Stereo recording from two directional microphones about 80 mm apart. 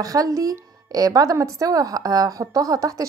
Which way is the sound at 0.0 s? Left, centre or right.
Right.